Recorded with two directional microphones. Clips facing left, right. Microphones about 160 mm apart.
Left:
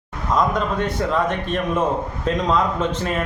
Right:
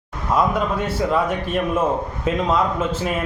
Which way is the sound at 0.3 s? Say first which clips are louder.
Even; 5° right (ahead or behind).